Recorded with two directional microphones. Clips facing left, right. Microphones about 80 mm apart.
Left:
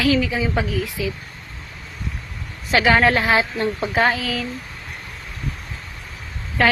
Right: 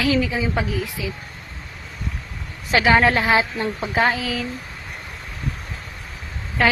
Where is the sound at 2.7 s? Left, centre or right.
Centre.